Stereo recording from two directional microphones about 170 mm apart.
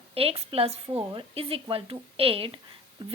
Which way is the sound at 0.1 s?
35° right (ahead or behind).